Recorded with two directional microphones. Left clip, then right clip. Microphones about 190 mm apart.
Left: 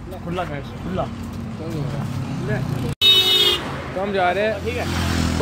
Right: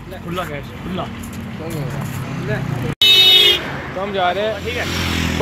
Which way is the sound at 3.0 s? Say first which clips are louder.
Right 4 dB; 55° left (ahead or behind).